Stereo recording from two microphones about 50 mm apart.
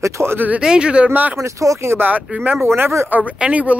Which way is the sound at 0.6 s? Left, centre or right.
Centre.